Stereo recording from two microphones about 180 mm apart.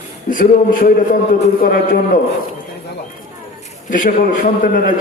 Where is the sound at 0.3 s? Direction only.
50° left (ahead or behind).